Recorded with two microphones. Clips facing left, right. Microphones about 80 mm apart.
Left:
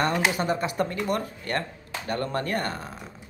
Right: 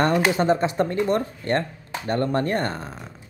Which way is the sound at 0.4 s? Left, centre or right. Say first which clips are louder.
Right 5 dB; right.